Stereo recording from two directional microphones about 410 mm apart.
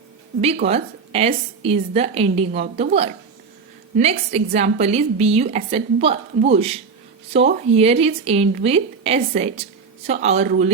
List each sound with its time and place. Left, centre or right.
0.4 s a woman's voice: centre